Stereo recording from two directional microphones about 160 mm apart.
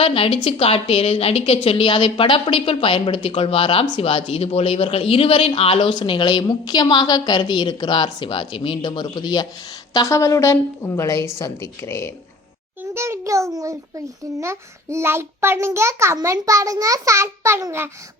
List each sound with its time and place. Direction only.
0.0 s a woman's voice: 35° left (ahead or behind); by 12.1 s 15° left (ahead or behind)
12.9 s a child's voice: 15° right (ahead or behind)